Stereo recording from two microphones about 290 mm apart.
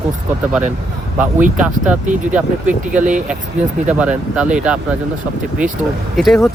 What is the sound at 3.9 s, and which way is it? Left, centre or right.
Speech, centre.